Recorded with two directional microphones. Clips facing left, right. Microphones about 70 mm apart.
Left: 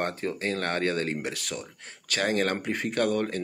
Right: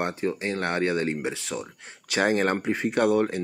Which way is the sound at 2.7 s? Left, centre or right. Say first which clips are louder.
Right 4 dB; centre.